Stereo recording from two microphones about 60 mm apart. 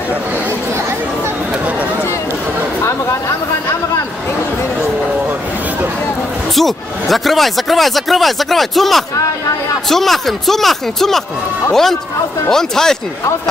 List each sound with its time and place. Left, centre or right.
2.8 s chatter: left
6.5 s speech: centre